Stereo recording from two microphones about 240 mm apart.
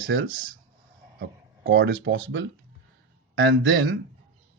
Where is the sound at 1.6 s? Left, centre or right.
Right.